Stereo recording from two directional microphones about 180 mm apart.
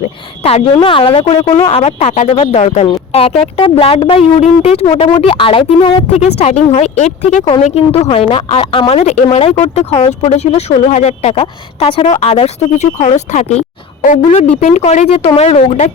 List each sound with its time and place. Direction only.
0.4 s speech: 35° left (ahead or behind)